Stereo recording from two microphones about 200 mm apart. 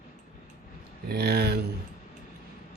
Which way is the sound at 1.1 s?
55° right (ahead or behind).